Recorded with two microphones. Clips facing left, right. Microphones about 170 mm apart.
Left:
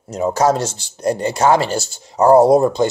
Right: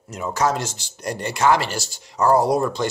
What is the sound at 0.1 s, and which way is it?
Speech, 35° left (ahead or behind).